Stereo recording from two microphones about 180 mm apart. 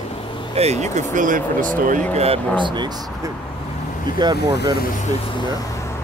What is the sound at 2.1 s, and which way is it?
Speech, 35° right (ahead or behind).